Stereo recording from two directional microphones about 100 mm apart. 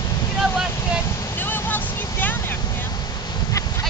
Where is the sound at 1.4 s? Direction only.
20° left (ahead or behind).